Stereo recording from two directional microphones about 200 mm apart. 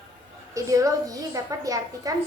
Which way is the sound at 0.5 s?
15° right (ahead or behind).